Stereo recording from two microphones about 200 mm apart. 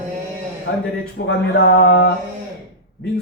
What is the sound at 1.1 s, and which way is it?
Speech, 60° left (ahead or behind).